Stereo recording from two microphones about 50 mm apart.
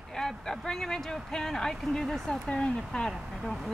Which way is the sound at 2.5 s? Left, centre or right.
Left.